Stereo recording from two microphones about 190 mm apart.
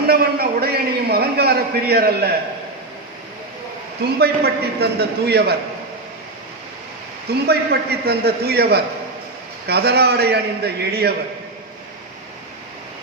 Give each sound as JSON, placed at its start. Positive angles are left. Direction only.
{"t": 0.1, "sound": "a man's voice", "side_deg": -55}
{"t": 4.2, "sound": "a man's voice", "side_deg": -55}
{"t": 7.3, "sound": "a man's voice", "side_deg": -55}